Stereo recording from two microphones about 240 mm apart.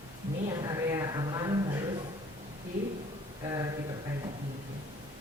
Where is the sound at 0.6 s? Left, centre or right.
Centre.